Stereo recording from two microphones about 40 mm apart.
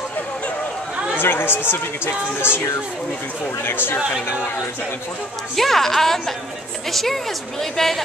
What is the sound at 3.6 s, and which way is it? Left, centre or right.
Speech, left.